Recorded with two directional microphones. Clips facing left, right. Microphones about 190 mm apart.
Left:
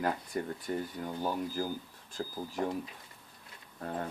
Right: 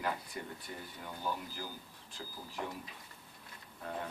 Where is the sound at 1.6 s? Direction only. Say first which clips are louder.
Left 10 dB; 45° left (ahead or behind).